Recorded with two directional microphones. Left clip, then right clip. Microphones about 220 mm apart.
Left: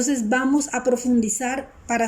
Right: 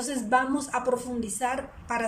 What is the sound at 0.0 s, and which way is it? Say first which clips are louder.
A woman's voice: left 3 dB; 30° left (ahead or behind).